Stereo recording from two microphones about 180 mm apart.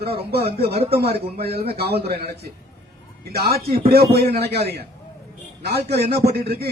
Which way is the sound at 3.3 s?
60° right (ahead or behind).